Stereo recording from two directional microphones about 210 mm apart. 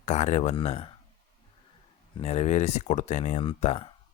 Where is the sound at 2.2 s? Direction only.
30° left (ahead or behind).